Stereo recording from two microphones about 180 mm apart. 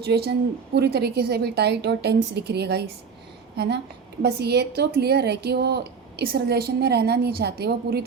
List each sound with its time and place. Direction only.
0.0 s speech: 65° right (ahead or behind)
4.2 s speech: 65° right (ahead or behind)